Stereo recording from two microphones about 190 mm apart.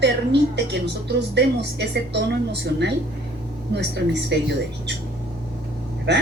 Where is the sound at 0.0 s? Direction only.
65° right (ahead or behind).